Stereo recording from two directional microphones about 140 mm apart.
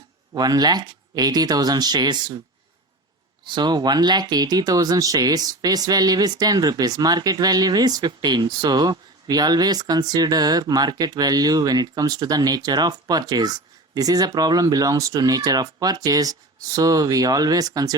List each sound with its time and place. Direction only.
0.3 s speech: 30° right (ahead or behind)
3.4 s speech: 30° right (ahead or behind)